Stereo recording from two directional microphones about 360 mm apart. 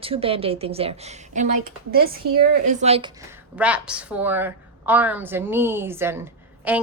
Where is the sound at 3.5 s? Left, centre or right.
Centre.